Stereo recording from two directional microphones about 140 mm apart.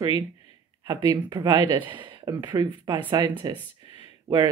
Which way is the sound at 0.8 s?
30° right (ahead or behind).